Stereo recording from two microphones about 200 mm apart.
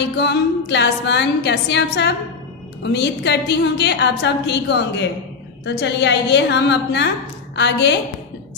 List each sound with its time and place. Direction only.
0.2 s a woman's voice: 60° left (ahead or behind)